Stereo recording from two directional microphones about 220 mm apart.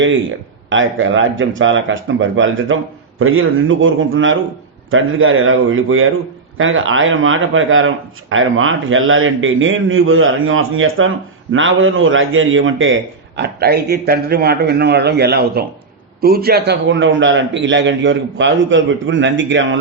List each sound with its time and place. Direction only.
0.0 s speech: 60° right (ahead or behind)
3.2 s a man's voice: 70° right (ahead or behind); by 19.6 s 55° right (ahead or behind)